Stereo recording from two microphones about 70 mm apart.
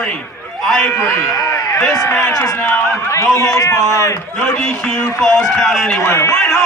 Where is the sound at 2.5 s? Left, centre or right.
Left.